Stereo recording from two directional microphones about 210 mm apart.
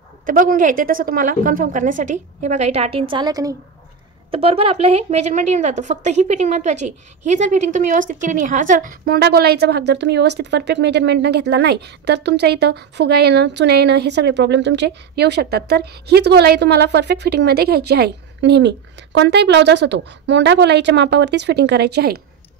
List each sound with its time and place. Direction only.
0.3 s a woman's voice: 40° right (ahead or behind)